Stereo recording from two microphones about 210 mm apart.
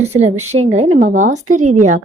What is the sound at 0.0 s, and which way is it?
Speech, 30° right (ahead or behind).